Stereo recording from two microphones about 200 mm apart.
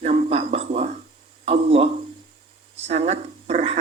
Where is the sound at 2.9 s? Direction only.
30° right (ahead or behind).